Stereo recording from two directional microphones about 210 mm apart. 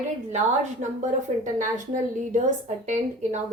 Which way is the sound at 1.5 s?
35° right (ahead or behind).